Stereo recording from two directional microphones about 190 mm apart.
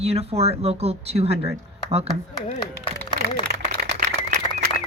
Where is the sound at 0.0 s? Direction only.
35° right (ahead or behind).